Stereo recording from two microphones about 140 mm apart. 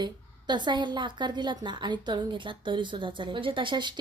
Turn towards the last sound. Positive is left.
turn(degrees=-35)  # may be behind; listen again after turning